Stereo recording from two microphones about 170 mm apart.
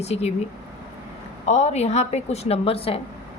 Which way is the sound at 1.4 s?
40° left (ahead or behind).